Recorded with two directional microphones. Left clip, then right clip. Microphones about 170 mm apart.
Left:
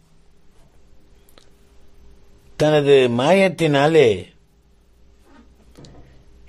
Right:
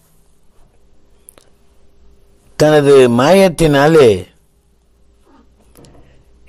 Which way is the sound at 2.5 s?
35° right (ahead or behind).